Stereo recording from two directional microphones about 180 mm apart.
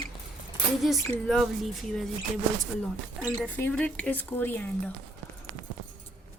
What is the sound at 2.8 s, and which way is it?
Speech, 5° left (ahead or behind).